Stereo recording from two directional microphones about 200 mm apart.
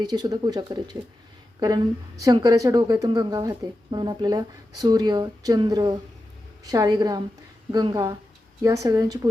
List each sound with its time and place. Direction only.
0.0 s a woman's voice: 20° right (ahead or behind)